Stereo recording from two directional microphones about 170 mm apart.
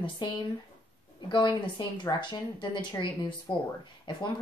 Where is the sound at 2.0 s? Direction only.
25° left (ahead or behind).